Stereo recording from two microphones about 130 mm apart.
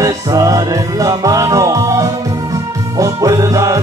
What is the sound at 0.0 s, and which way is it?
Music, 25° right (ahead or behind).